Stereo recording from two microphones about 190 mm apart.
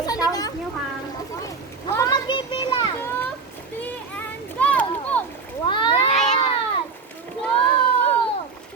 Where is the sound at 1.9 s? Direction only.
20° left (ahead or behind).